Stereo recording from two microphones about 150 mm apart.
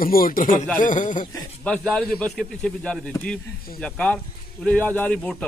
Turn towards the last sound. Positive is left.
turn(degrees=10)  # may be behind; listen again after turning